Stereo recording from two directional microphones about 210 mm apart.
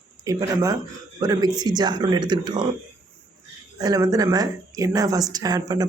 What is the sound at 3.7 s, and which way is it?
A woman's voice, 15° right (ahead or behind).